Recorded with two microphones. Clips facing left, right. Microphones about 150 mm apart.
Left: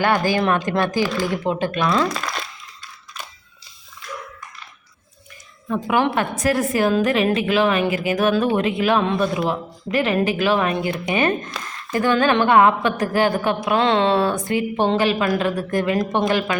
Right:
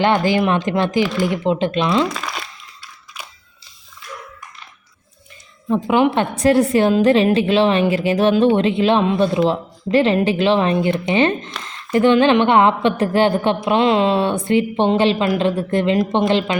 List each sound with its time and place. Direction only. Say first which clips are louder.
0.0 s speech: right 3 dB; 20° right (ahead or behind)
2.0 s a sound: even; 5° right (ahead or behind)
3.2 s crushing: even; 10° right (ahead or behind)
5.6 s speech: right 4 dB; 20° right (ahead or behind)
13.8 s speech: right 2 dB; 15° right (ahead or behind)
14.2 s speech: right 3 dB; 25° right (ahead or behind)